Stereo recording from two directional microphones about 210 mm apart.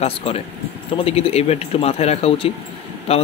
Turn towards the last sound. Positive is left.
turn(degrees=30)  # may be behind; listen again after turning